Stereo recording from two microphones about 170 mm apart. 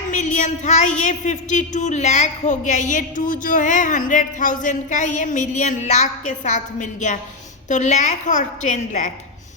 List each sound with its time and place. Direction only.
0.1 s a woman's voice: 45° left (ahead or behind)